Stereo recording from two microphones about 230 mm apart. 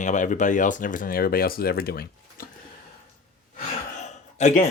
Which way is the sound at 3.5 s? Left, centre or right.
Left.